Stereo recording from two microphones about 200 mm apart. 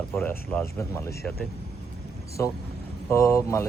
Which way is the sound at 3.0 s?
15° left (ahead or behind).